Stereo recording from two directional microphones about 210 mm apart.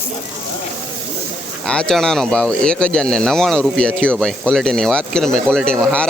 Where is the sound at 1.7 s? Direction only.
5° left (ahead or behind).